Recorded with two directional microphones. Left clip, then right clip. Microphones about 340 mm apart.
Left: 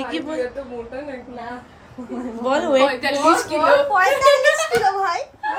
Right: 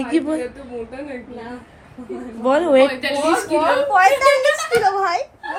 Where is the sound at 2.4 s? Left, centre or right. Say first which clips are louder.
Right 3 dB; right.